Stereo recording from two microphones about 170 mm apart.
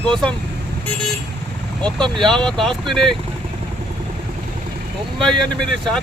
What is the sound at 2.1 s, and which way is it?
Speech, 5° left (ahead or behind).